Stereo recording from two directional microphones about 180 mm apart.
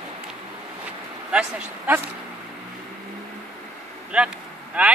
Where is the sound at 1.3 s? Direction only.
5° right (ahead or behind).